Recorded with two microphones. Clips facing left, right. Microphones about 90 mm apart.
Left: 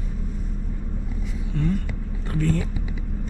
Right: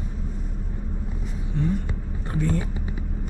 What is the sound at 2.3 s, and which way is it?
Speech, 15° right (ahead or behind).